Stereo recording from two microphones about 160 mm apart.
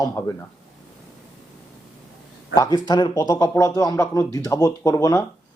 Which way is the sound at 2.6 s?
25° left (ahead or behind).